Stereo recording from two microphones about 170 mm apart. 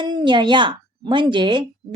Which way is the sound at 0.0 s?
25° right (ahead or behind).